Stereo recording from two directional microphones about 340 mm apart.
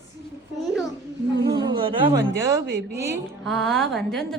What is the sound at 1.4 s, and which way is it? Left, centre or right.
Speech, centre.